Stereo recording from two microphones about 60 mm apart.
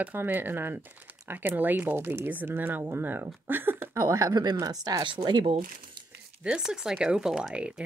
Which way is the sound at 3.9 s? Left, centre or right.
Right.